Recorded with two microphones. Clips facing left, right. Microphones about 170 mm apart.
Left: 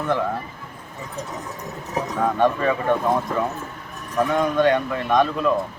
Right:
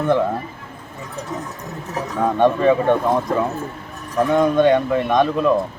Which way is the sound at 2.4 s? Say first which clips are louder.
Right 6 dB; 25° right (ahead or behind).